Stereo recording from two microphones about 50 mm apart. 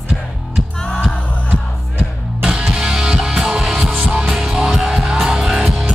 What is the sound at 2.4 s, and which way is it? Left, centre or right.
Music, centre.